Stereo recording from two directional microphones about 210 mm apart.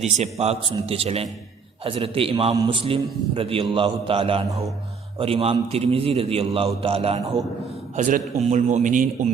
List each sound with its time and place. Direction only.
0.0 s a man's voice: 30° right (ahead or behind)